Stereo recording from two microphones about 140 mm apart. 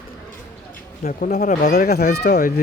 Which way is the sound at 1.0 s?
65° left (ahead or behind).